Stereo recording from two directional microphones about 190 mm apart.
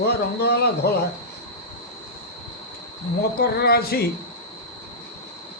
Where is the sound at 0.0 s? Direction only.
60° left (ahead or behind).